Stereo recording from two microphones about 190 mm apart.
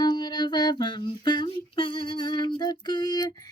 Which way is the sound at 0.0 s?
20° left (ahead or behind).